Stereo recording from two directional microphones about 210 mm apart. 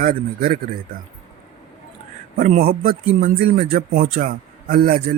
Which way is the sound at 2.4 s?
30° right (ahead or behind).